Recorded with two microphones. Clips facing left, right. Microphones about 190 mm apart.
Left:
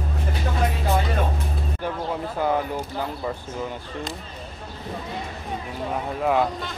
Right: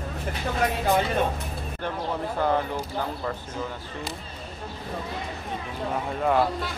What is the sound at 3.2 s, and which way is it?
Speech, 10° left (ahead or behind).